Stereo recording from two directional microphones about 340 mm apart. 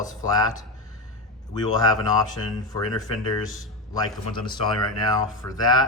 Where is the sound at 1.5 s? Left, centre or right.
Centre.